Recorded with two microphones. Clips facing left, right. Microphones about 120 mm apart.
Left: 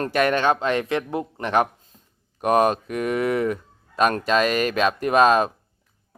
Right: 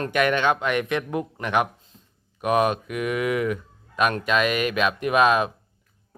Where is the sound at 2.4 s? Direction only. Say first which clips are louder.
Left 2 dB; 40° left (ahead or behind).